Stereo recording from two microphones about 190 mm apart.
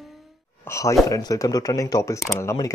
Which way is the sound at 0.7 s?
15° left (ahead or behind).